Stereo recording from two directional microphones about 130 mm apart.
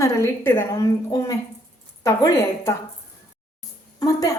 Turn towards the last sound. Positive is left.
turn(degrees=25)  # may be behind; listen again after turning